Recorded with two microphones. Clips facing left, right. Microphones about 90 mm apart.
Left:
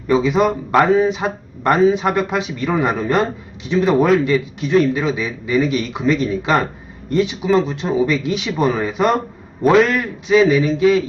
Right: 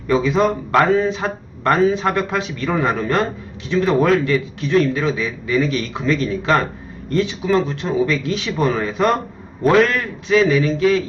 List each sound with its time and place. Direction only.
0.1 s speech: 15° left (ahead or behind)